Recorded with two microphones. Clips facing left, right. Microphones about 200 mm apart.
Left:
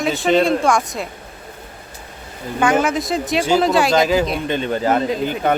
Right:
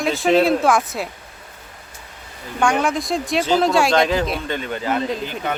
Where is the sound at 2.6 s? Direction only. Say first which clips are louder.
Left 2 dB; centre (ahead or behind).